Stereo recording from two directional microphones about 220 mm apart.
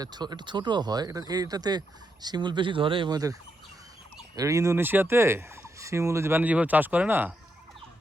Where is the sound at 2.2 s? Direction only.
20° right (ahead or behind).